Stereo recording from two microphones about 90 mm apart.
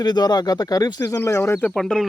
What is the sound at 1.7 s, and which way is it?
Speech, 5° left (ahead or behind).